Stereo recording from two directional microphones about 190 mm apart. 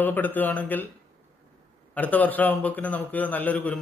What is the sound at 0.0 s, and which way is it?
Speech, 10° left (ahead or behind).